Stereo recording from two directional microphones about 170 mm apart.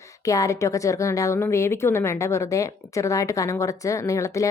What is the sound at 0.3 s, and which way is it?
A woman's voice, 20° left (ahead or behind).